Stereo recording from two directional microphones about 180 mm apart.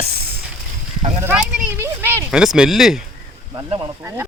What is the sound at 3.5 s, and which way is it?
Speech, 20° right (ahead or behind).